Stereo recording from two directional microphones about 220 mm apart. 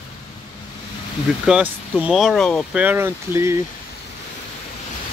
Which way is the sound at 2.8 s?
10° right (ahead or behind).